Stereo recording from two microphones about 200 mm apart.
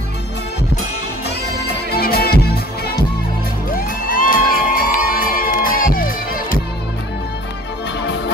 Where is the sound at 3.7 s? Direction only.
45° left (ahead or behind).